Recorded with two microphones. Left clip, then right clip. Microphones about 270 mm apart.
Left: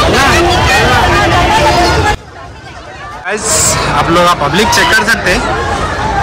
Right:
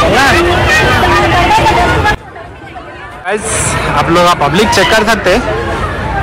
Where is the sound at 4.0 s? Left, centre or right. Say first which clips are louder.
Right 1 dB; centre.